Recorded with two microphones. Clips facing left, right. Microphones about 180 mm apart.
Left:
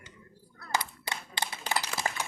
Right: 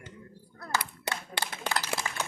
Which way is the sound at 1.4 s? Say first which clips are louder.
Left 4 dB; 70° right (ahead or behind).